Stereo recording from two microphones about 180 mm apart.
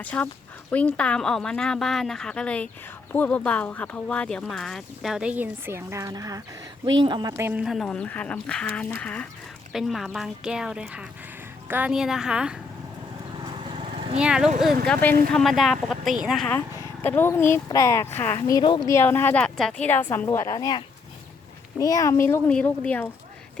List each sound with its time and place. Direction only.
0.0 s a woman's voice: 10° left (ahead or behind); by 7.6 s 15° right (ahead or behind)
7.6 s a woman's voice: centre (ahead or behind)
13.7 s vehicle: 30° right (ahead or behind)
14.2 s speech: 5° right (ahead or behind)
16.5 s a woman's voice: 10° left (ahead or behind)
18.3 s a woman's voice: 25° left (ahead or behind); by 23.0 s 10° left (ahead or behind)